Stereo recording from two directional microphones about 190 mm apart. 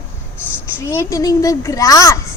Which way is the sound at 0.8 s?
15° left (ahead or behind).